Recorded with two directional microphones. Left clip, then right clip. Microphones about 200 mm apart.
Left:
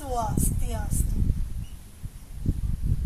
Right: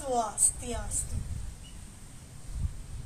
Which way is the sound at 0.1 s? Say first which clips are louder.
Even; 35° left (ahead or behind).